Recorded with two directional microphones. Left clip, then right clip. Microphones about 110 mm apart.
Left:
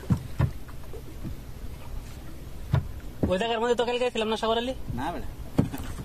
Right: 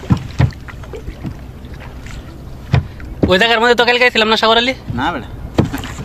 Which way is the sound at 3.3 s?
20° right (ahead or behind).